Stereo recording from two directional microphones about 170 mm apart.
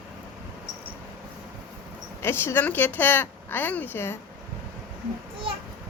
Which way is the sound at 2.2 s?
15° left (ahead or behind).